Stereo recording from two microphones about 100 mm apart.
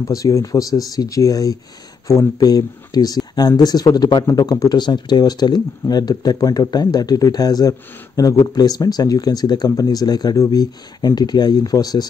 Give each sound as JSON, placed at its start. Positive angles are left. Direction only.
{"t": 0.1, "sound": "speech", "side_deg": 35}